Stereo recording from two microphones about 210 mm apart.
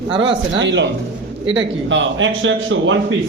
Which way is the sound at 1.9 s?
65° right (ahead or behind).